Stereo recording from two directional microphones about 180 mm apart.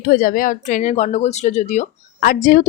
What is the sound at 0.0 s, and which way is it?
A woman's voice, 55° left (ahead or behind).